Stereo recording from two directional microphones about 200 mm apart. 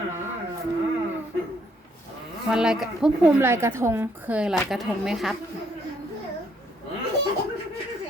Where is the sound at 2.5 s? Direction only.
5° right (ahead or behind).